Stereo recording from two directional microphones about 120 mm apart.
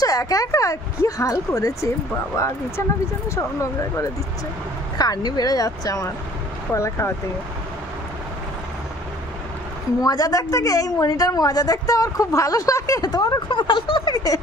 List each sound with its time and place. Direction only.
0.0 s speech: 30° left (ahead or behind)
4.9 s speech: 30° left (ahead or behind)
10.0 s speech: 30° left (ahead or behind)